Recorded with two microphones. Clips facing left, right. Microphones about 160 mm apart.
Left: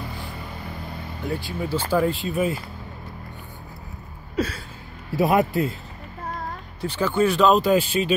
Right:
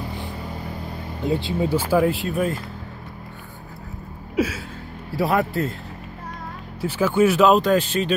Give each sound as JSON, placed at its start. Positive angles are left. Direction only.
{"t": 1.2, "sound": "speech", "side_deg": -20}
{"t": 1.8, "sound": "speech", "side_deg": -5}
{"t": 4.4, "sound": "a sound", "side_deg": -10}
{"t": 5.1, "sound": "a man's voice", "side_deg": 20}
{"t": 6.8, "sound": "speech", "side_deg": -5}